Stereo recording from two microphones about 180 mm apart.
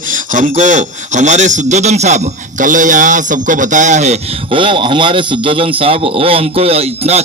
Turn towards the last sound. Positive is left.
turn(degrees=-35)  # may be behind; listen again after turning